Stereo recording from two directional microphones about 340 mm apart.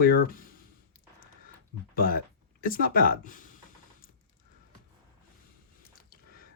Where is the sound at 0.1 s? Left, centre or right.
Left.